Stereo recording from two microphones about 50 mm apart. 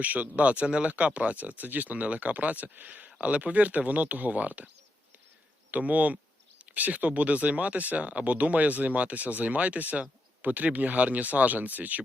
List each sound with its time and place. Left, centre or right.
0.0 s speech: right
5.7 s speech: right